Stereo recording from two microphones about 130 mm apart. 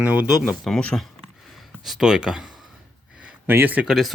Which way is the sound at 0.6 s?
5° left (ahead or behind).